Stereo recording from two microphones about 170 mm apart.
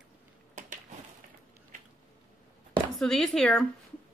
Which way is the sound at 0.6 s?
50° right (ahead or behind).